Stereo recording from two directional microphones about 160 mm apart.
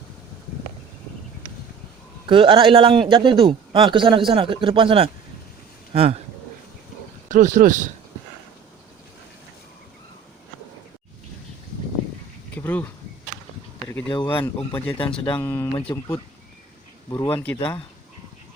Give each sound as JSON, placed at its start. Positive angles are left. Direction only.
{"t": 2.2, "sound": "a man's voice", "side_deg": -30}
{"t": 7.3, "sound": "speech", "side_deg": -55}
{"t": 12.5, "sound": "a sound", "side_deg": 10}
{"t": 13.9, "sound": "speech", "side_deg": 15}
{"t": 14.9, "sound": "a man's voice", "side_deg": 30}
{"t": 15.4, "sound": "speech", "side_deg": 15}
{"t": 17.1, "sound": "speech", "side_deg": 25}